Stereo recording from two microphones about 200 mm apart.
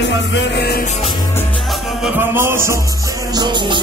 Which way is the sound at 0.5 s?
55° left (ahead or behind).